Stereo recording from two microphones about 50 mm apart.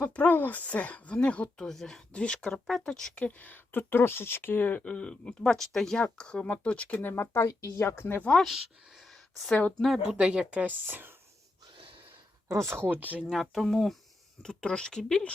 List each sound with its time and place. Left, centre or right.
0.0 s speech: left
1.5 s speech: centre
2.1 s speech: left
3.2 s speech: left
4.8 s speech: centre
6.0 s speech: centre
6.9 s speech: left
7.4 s a woman's voice: left
8.5 s a sound: centre
10.1 s speech: right
12.5 s speech: right
12.9 s speech: right
13.2 s speech: centre
14.4 s speech: centre